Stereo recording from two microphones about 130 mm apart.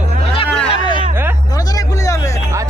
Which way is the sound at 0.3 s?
45° left (ahead or behind).